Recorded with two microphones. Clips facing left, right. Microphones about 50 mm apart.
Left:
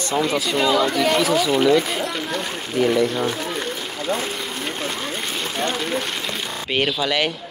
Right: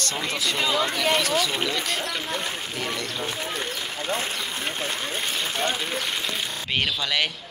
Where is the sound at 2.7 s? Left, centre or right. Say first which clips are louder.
Left 11 dB; centre.